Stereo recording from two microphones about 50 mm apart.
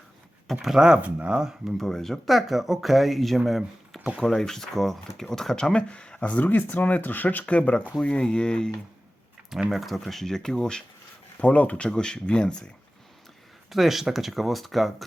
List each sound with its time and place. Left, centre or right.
0.6 s speech: centre
1.0 s speech: right
1.4 s speech: centre
1.8 s speech: centre; by 6.4 s left
6.4 s speech: left
7.4 s speech: left
9.7 s speech: centre
11.3 s speech: left
11.9 s speech: centre
13.7 s speech: centre